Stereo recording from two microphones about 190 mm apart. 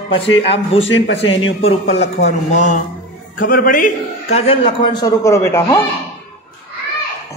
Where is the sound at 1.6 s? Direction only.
35° left (ahead or behind); by 5.7 s 15° left (ahead or behind).